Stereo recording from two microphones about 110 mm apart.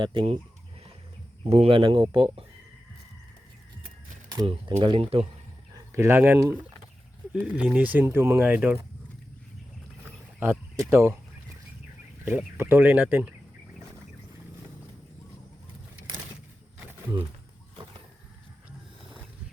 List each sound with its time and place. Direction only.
0.0 s speech: 50° right (ahead or behind)
1.5 s speech: 60° right (ahead or behind); by 2.4 s 45° right (ahead or behind)
4.4 s speech: 60° right (ahead or behind)
5.7 s a sound: 25° right (ahead or behind)
7.4 s speech: 10° right (ahead or behind)
10.4 s speech: 25° right (ahead or behind)
12.2 s speech: 20° right (ahead or behind)